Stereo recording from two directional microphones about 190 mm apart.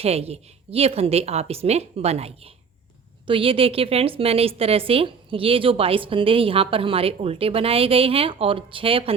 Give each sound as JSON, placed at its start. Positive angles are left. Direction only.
{"t": 0.0, "sound": "a woman's voice", "side_deg": -30}